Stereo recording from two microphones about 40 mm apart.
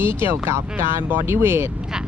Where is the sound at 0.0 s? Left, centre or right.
Right.